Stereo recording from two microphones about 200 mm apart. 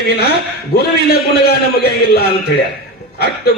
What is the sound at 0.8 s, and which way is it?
A man's voice, 50° left (ahead or behind).